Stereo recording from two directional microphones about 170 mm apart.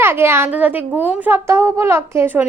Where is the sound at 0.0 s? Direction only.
15° right (ahead or behind).